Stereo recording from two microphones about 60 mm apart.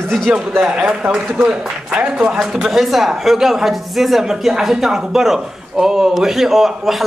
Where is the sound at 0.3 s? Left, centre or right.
Centre.